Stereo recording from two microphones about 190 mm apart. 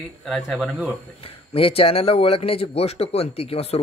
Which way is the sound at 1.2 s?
30° left (ahead or behind).